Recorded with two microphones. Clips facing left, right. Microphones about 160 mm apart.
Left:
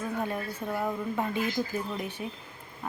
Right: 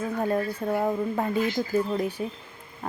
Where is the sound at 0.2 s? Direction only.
35° right (ahead or behind).